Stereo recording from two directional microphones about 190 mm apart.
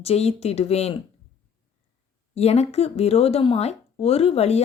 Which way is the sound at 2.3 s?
35° left (ahead or behind).